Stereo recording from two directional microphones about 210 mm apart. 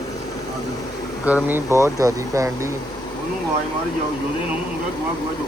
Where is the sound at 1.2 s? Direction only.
10° right (ahead or behind).